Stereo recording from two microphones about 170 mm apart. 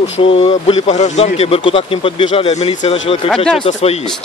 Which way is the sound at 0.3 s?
30° left (ahead or behind).